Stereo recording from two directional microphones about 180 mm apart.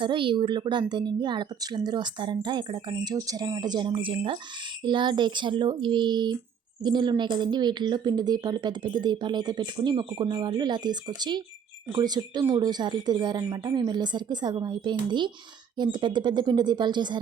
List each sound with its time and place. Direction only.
0.0 s a woman's voice: 25° right (ahead or behind)